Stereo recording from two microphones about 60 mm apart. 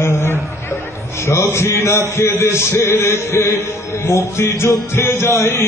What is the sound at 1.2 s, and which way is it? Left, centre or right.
A man's voice, left.